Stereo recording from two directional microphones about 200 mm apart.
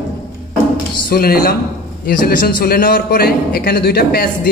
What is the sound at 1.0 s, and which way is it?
A man's voice, 50° left (ahead or behind).